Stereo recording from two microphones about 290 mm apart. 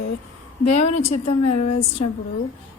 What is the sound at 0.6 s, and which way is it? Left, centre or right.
Speech, left.